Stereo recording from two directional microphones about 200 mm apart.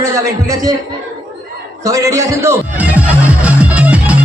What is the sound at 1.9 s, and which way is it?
Speech, 15° right (ahead or behind).